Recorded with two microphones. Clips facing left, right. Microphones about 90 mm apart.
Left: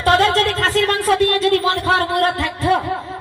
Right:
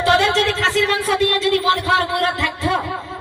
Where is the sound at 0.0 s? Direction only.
40° left (ahead or behind).